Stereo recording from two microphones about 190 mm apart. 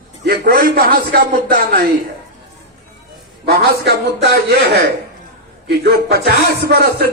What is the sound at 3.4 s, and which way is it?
A man's voice, 60° right (ahead or behind).